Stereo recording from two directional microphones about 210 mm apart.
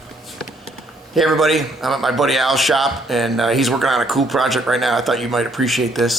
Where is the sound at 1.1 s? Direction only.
Centre (ahead or behind).